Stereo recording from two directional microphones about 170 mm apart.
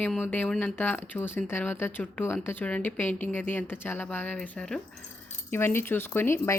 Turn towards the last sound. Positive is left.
turn(degrees=15)  # may be behind; listen again after turning